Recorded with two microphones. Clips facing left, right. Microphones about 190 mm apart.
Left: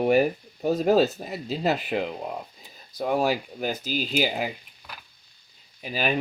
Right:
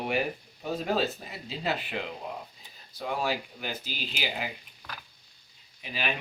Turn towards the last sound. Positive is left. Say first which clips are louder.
# left 6 dB
turn(degrees=40)  # may be behind; listen again after turning